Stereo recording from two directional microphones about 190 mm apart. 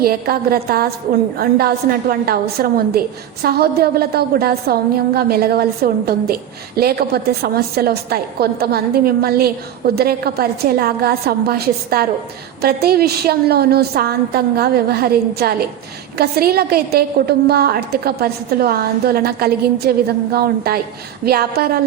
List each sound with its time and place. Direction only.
0.0 s a woman's voice: 50° right (ahead or behind)